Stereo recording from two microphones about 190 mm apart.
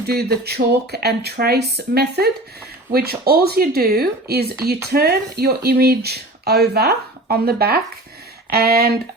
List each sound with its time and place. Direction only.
0.0 s speech: 55° right (ahead or behind)